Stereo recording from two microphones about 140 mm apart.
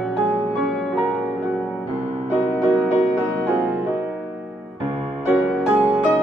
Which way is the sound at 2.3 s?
Centre (ahead or behind).